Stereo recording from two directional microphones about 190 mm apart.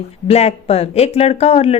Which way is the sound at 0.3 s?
35° left (ahead or behind).